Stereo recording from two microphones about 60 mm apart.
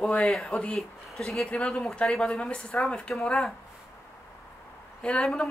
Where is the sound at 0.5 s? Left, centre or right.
Centre.